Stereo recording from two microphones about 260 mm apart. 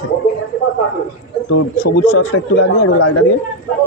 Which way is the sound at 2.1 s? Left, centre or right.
Left.